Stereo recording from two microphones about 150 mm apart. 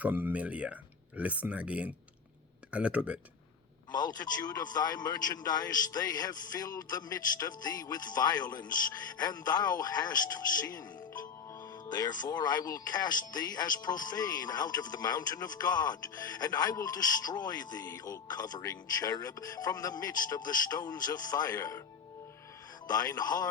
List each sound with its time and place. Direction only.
0.0 s speech: 10° right (ahead or behind)
3.9 s speech: 25° left (ahead or behind)
22.9 s speech: 25° left (ahead or behind)